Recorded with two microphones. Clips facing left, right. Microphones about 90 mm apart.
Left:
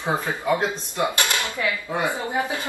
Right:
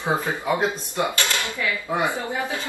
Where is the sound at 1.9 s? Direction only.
20° right (ahead or behind).